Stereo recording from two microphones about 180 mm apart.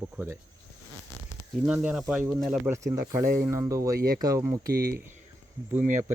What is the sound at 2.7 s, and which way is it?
Speech, 15° right (ahead or behind).